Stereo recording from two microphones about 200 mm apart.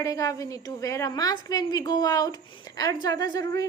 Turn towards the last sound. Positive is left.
turn(degrees=20)  # may be behind; listen again after turning